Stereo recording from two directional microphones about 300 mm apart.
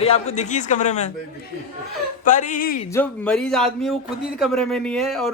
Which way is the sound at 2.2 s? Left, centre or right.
Left.